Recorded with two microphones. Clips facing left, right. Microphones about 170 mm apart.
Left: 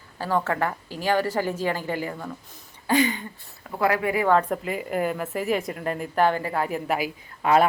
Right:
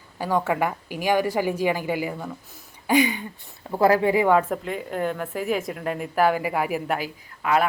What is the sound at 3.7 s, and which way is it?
Speech, 30° right (ahead or behind).